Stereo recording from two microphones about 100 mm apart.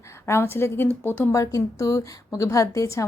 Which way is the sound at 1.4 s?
35° left (ahead or behind).